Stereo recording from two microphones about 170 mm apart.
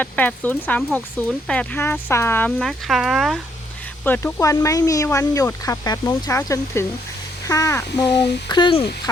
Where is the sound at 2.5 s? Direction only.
Centre (ahead or behind).